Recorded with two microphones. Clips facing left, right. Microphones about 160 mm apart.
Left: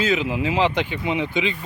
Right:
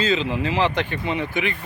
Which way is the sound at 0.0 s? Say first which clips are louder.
Even; 10° left (ahead or behind).